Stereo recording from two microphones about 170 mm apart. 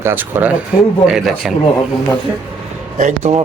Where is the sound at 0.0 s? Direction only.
10° right (ahead or behind).